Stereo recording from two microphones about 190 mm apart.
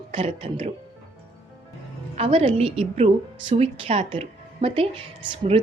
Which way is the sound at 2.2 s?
30° right (ahead or behind).